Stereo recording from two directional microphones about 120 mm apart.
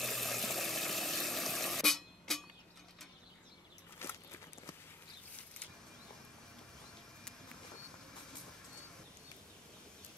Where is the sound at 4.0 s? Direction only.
20° left (ahead or behind).